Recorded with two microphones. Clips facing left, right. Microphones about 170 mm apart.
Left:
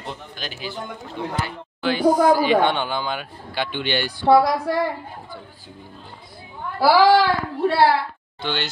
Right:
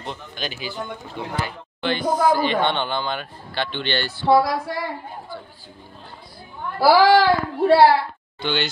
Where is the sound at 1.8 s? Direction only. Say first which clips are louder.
Left 3 dB; 10° left (ahead or behind).